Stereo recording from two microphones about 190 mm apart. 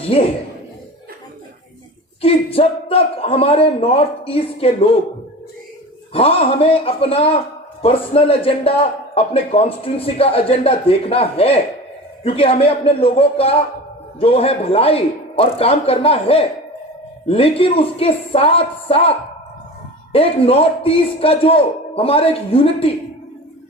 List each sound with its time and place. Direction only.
0.1 s speech: 30° left (ahead or behind)
2.2 s a man's voice: 30° left (ahead or behind)
6.1 s a man's voice: 30° left (ahead or behind)
20.1 s a man's voice: 30° left (ahead or behind)